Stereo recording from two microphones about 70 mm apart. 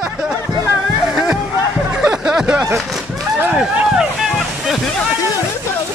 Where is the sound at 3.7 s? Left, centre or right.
Centre.